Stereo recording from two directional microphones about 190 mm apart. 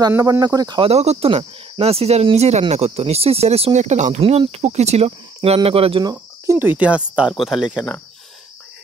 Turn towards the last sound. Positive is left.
turn(degrees=0)  # may be behind; listen again after turning